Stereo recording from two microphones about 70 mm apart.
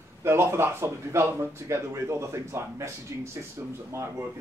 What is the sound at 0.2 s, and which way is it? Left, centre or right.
A man's voice, right.